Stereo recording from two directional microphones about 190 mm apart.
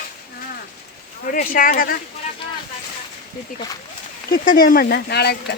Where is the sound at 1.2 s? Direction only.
45° left (ahead or behind).